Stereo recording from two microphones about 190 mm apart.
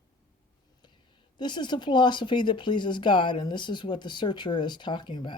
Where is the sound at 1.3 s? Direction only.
25° left (ahead or behind).